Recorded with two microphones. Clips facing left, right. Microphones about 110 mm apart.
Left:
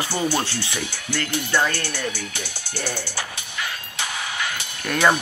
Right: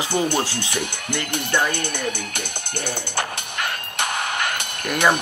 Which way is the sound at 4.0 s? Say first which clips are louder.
Right 4 dB; 55° right (ahead or behind).